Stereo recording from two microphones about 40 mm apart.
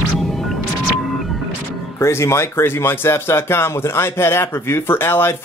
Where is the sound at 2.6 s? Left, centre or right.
Left.